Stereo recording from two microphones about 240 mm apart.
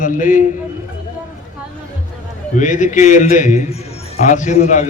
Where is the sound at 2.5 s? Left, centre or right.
Left.